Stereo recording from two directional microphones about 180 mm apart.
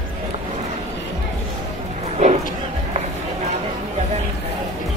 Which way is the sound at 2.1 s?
35° right (ahead or behind).